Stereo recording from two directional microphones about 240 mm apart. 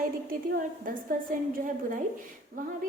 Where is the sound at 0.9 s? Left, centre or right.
Right.